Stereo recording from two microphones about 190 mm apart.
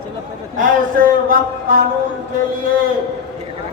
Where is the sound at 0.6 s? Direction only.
45° right (ahead or behind).